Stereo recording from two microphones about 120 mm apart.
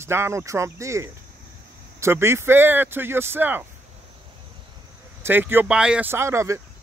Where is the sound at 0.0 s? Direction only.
20° right (ahead or behind).